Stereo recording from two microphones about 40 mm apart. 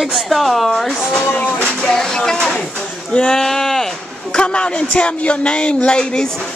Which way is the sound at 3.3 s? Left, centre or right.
Centre.